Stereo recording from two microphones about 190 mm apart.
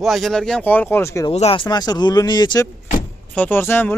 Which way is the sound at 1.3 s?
30° left (ahead or behind).